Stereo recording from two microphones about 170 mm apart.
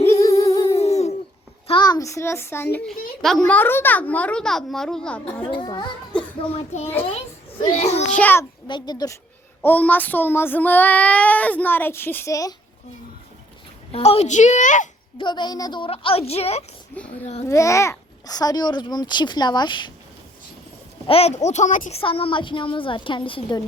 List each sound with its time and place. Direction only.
0.0 s humming: 20° left (ahead or behind)
0.8 s a sound: 40° left (ahead or behind)
1.6 s a child's voice: 25° left (ahead or behind)
3.2 s speech: centre (ahead or behind)
5.4 s a child's voice: 25° left (ahead or behind)
6.1 s child singing: 5° left (ahead or behind)
7.8 s a woman's voice: 40° left (ahead or behind)
8.1 s speech: 10° left (ahead or behind)
8.6 s a child's voice: 25° left (ahead or behind)
9.6 s speech: 10° left (ahead or behind)
13.9 s a woman's voice: 35° left (ahead or behind)
15.2 s a woman's voice: 25° left (ahead or behind)
16.9 s a child's voice: 10° left (ahead or behind); by 19.9 s 25° left (ahead or behind)
21.1 s a woman's voice: 35° left (ahead or behind)